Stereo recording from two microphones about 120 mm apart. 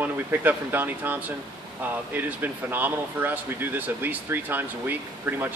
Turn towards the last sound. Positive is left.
turn(degrees=-15)  # may be behind; listen again after turning